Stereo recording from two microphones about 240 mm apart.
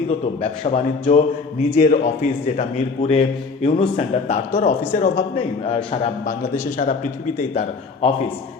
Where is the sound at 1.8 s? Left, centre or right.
Left.